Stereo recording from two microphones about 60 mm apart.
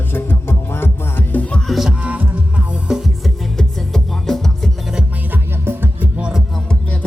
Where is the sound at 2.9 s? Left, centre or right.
Centre.